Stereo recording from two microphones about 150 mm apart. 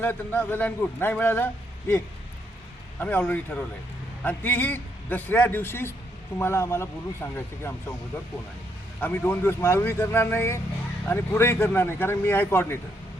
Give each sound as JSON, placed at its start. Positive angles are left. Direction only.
{"t": 0.0, "sound": "a man's voice", "side_deg": 10}
{"t": 3.0, "sound": "a man's voice", "side_deg": 10}
{"t": 9.0, "sound": "a man's voice", "side_deg": 10}